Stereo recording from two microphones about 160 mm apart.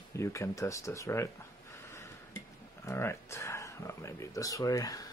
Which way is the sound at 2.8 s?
15° left (ahead or behind).